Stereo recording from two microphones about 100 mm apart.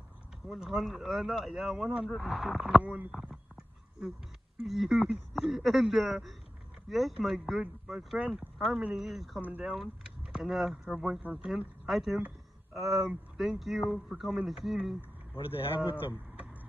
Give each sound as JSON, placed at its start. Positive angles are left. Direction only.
{"t": 0.5, "sound": "speech", "side_deg": -5}
{"t": 2.8, "sound": "speech", "side_deg": -15}
{"t": 3.1, "sound": "a sound", "side_deg": -5}
{"t": 4.6, "sound": "speech", "side_deg": -5}
{"t": 15.3, "sound": "speech", "side_deg": 65}
{"t": 15.8, "sound": "speech", "side_deg": -20}